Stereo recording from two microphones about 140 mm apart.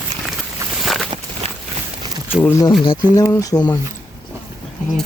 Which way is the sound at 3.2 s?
25° left (ahead or behind).